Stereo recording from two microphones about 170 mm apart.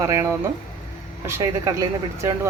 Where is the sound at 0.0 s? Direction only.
15° right (ahead or behind).